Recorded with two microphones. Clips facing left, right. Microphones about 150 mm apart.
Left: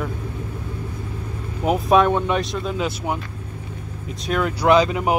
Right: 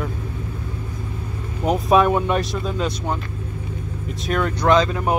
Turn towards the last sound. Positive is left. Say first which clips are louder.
# left 1 dB
turn(degrees=15)  # may be behind; listen again after turning